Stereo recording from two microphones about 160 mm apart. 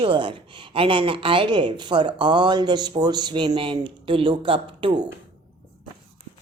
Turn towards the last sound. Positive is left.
turn(degrees=-30)  # may be behind; listen again after turning